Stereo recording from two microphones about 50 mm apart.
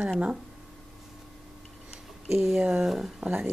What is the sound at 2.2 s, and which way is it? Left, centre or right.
Speech, centre.